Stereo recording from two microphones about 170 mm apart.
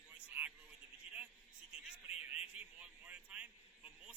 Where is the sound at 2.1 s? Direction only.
40° left (ahead or behind).